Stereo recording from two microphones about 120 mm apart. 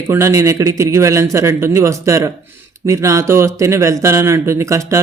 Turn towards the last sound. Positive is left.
turn(degrees=-25)  # may be behind; listen again after turning